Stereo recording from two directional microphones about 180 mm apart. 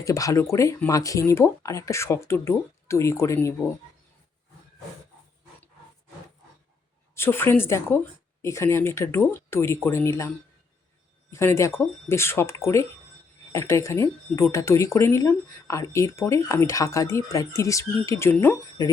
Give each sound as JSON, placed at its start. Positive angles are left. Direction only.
{"t": 0.0, "sound": "speech", "side_deg": 20}
{"t": 7.2, "sound": "speech", "side_deg": 15}